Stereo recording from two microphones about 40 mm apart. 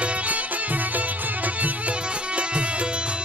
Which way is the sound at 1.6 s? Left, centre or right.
Right.